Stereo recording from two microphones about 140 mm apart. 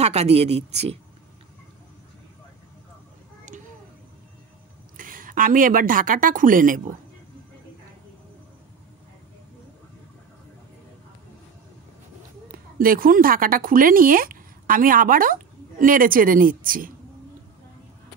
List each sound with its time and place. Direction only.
0.0 s speech: 50° right (ahead or behind)
4.9 s a woman's voice: 80° right
12.4 s a woman's voice: 90° right